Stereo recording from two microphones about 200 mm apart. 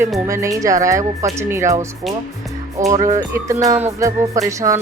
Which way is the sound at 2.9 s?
35° right (ahead or behind).